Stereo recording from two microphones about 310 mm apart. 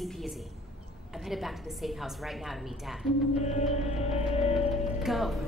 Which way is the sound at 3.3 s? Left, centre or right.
Left.